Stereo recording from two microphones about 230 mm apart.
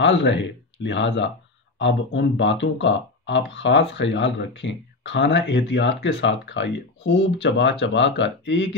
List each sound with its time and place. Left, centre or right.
0.0 s speech: left